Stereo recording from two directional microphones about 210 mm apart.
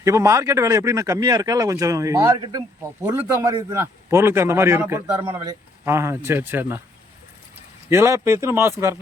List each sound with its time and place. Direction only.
0.0 s speech: 15° right (ahead or behind)
5.2 s a man's voice: 25° right (ahead or behind)
5.8 s speech: 15° right (ahead or behind)
7.9 s speech: 15° right (ahead or behind)